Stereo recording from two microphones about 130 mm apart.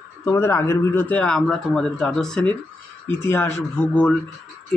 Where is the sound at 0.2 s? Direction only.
20° left (ahead or behind); by 2.5 s 5° left (ahead or behind).